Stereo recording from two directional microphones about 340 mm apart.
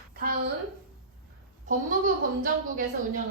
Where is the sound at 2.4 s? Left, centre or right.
Right.